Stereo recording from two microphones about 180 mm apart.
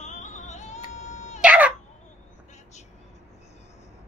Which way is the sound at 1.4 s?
5° right (ahead or behind).